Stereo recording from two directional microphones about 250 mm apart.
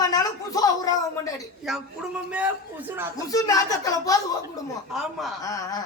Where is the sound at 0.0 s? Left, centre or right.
Centre.